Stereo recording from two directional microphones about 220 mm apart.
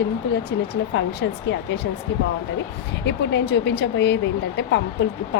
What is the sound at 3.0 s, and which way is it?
Speech, 55° left (ahead or behind).